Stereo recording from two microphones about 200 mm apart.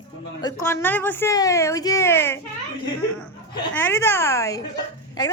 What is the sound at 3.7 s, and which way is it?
Speech, 10° left (ahead or behind).